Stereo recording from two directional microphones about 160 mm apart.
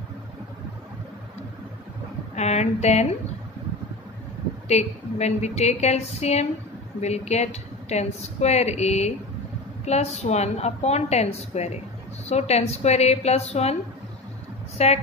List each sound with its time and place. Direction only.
2.3 s a woman's voice: 45° left (ahead or behind)
4.6 s a woman's voice: 45° left (ahead or behind)
14.8 s a woman's voice: 40° left (ahead or behind)